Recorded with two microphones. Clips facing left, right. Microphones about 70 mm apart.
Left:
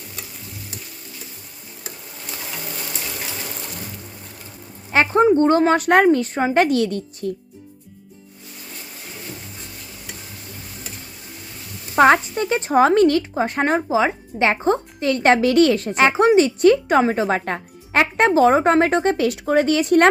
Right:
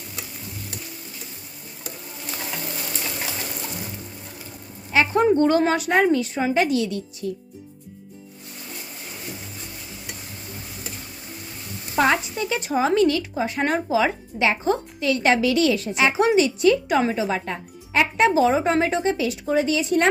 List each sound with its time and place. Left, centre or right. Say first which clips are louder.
4.9 s speech: left 3 dB; left
5.8 s speech: left 4 dB; left
11.9 s speech: left 6 dB; left
12.7 s speech: left 5 dB; left